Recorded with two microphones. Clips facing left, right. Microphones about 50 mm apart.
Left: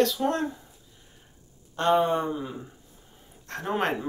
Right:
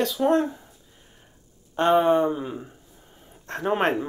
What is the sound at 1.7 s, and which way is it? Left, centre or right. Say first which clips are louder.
Speech: right 4 dB; right.